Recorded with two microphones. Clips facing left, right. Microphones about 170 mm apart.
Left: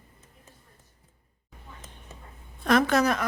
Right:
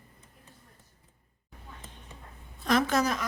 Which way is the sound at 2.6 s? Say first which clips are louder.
Left 4 dB; 60° left (ahead or behind).